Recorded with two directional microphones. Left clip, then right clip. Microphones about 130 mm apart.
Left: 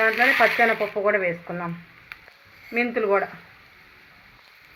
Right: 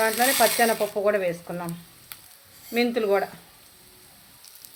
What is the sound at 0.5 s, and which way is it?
Stir, 25° right (ahead or behind).